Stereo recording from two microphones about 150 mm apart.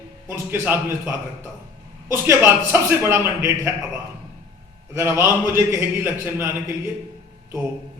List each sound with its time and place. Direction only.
0.3 s a man's voice: 15° right (ahead or behind)
4.9 s a man's voice: 15° right (ahead or behind)